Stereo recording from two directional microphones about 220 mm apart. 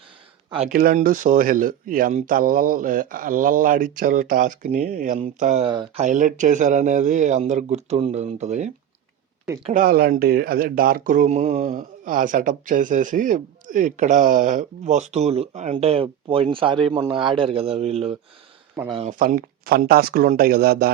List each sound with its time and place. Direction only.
0.7 s speech: 40° right (ahead or behind); by 6.1 s 20° right (ahead or behind)
6.1 s speech: 35° right (ahead or behind)
19.2 s speech: 40° right (ahead or behind)